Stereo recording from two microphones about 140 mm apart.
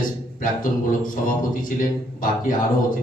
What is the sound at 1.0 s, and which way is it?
A man's voice, 80° left.